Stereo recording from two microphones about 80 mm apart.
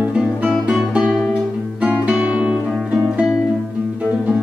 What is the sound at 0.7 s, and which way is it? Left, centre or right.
Music, centre.